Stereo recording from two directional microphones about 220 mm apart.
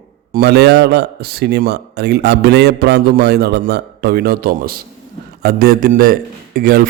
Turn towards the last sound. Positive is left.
turn(degrees=-40)  # may be behind; listen again after turning